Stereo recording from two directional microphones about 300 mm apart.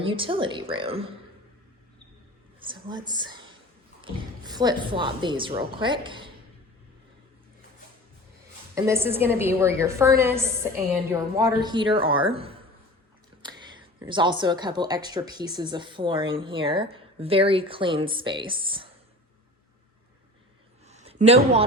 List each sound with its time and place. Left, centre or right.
0.0 s speech: centre
2.6 s a woman's voice: centre
8.7 s speech: centre
20.8 s a sound: right